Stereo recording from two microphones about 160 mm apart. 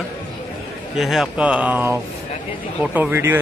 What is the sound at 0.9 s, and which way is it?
A man's voice, centre (ahead or behind).